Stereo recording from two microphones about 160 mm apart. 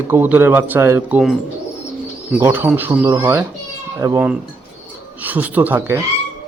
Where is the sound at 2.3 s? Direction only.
10° right (ahead or behind).